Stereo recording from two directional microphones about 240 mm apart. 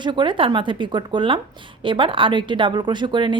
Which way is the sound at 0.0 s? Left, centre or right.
Centre.